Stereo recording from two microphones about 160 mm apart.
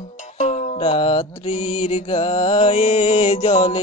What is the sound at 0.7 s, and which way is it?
Music, 35° left (ahead or behind).